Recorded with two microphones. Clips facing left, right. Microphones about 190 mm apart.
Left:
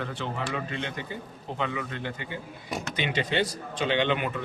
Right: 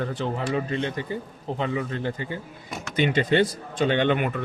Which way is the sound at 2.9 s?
50° right (ahead or behind).